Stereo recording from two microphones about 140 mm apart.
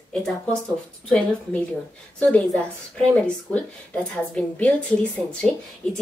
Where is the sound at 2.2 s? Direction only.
5° left (ahead or behind).